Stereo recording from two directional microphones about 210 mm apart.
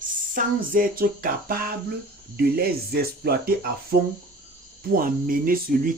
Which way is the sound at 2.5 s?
50° right (ahead or behind).